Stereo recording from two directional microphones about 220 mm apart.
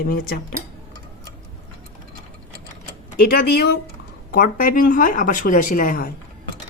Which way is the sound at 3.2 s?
40° left (ahead or behind).